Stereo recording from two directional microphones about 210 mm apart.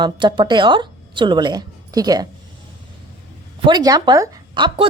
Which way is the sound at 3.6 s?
20° right (ahead or behind).